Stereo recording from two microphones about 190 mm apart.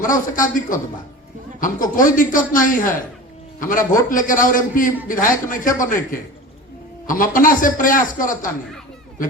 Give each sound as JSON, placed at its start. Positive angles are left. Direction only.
{"t": 0.0, "sound": "a man's voice", "side_deg": 45}